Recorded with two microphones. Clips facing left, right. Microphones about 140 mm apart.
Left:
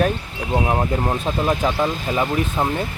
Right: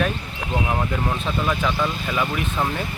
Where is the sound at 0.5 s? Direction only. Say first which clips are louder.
Left 4 dB; 30° left (ahead or behind).